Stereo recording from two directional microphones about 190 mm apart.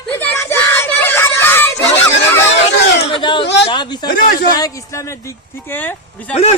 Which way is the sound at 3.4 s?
65° left (ahead or behind).